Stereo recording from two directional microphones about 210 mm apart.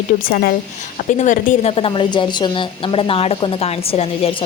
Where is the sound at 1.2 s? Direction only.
35° left (ahead or behind).